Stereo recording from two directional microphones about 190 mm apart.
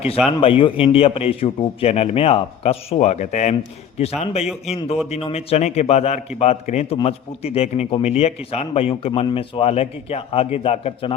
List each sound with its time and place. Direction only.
0.3 s a man's voice: 30° left (ahead or behind)